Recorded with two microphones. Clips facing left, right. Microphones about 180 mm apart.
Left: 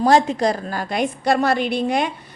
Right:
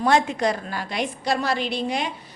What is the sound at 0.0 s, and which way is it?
A woman's voice, 35° left (ahead or behind).